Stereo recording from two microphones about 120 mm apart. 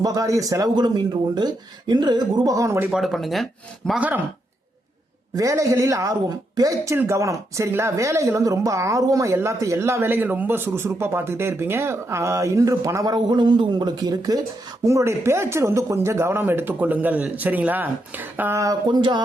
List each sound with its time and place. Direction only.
0.0 s speech: 30° right (ahead or behind)
2.9 s speech: centre (ahead or behind)
5.4 s a woman's voice: 25° right (ahead or behind)